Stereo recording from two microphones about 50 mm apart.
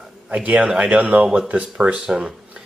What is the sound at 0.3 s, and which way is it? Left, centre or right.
Speech, right.